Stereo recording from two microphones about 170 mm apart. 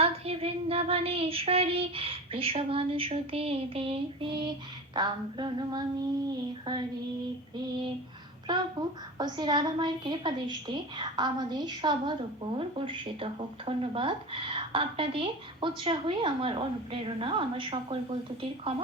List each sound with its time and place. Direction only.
0.0 s child singing: 35° right (ahead or behind)
4.9 s a woman's voice: 25° right (ahead or behind)
8.4 s a woman's voice: 25° right (ahead or behind)
18.7 s child singing: 30° right (ahead or behind)